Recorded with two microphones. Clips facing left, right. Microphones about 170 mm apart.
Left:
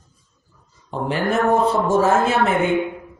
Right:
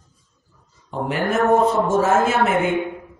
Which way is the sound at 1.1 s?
30° left (ahead or behind).